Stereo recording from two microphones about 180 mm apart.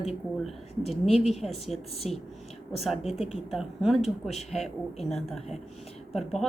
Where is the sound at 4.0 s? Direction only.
40° left (ahead or behind).